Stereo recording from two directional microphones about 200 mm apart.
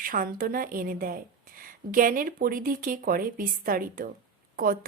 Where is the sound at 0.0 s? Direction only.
45° right (ahead or behind).